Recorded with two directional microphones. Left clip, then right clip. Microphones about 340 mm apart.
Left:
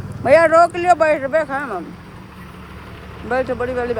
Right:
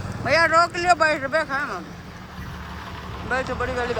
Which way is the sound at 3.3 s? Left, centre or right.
Centre.